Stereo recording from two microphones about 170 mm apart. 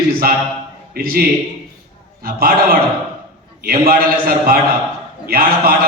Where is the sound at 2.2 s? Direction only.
60° right (ahead or behind).